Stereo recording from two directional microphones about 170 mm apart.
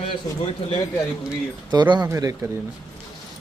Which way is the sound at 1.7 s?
25° right (ahead or behind).